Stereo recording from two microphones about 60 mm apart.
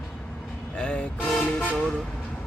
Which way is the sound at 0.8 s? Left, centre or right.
Centre.